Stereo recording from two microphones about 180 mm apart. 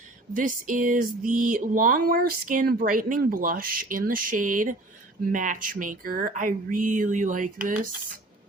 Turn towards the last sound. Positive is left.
turn(degrees=-50)  # may be behind; listen again after turning